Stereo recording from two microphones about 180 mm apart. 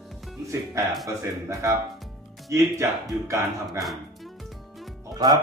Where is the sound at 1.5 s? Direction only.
15° right (ahead or behind).